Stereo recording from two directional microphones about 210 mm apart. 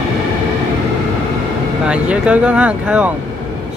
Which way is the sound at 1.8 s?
5° right (ahead or behind).